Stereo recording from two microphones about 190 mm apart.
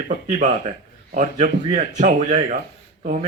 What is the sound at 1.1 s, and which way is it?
Speech, 40° right (ahead or behind).